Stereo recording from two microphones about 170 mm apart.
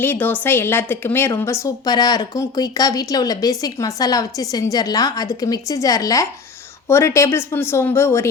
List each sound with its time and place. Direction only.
0.0 s a woman's voice: 10° left (ahead or behind)